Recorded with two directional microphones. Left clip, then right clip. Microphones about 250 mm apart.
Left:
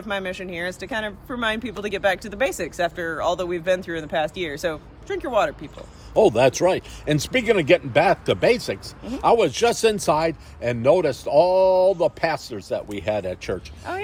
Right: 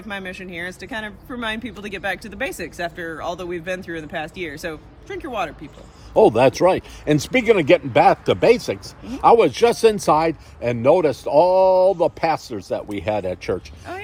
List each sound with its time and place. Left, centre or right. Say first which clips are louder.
0.1 s speech: left 3 dB; centre
6.1 s speech: right 3 dB; right